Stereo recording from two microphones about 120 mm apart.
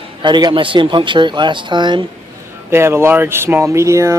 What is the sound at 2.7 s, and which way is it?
Speech, 20° right (ahead or behind).